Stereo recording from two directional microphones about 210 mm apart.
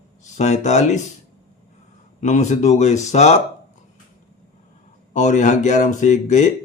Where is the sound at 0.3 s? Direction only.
35° left (ahead or behind).